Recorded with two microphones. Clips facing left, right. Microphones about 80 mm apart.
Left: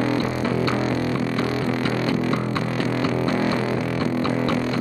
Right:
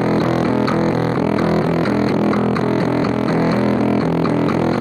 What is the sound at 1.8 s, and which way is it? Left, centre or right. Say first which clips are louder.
Music: right 6 dB; right.